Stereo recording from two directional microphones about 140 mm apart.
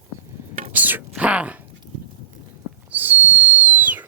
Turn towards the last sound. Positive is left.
turn(degrees=-10)  # may be behind; listen again after turning